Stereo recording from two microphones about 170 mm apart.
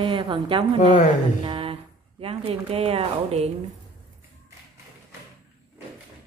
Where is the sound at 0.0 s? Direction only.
30° right (ahead or behind).